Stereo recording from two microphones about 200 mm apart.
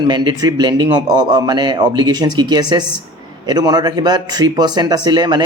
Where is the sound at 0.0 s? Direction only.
20° right (ahead or behind).